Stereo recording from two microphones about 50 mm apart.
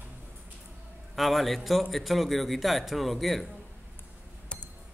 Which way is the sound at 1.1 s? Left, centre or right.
Centre.